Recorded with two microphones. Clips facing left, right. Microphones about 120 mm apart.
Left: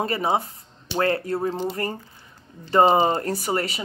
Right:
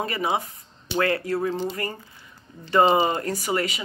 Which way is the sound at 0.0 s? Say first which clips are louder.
Left 2 dB; 30° left (ahead or behind).